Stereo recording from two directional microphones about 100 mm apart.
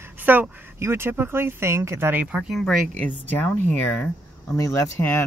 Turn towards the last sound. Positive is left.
turn(degrees=20)  # may be behind; listen again after turning